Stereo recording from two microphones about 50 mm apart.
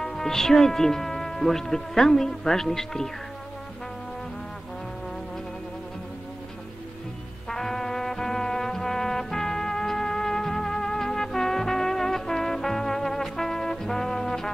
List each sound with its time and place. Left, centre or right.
0.0 s speech: centre
7.4 s music: centre